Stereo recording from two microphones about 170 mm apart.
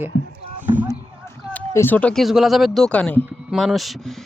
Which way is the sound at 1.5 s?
10° left (ahead or behind).